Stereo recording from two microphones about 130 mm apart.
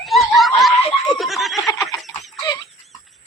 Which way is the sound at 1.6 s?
25° left (ahead or behind).